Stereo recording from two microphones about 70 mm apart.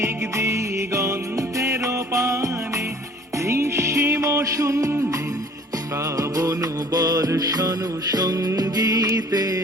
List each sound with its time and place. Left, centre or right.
0.0 s music: right